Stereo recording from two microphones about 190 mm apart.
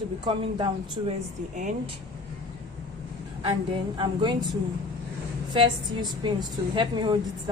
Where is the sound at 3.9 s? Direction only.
25° right (ahead or behind).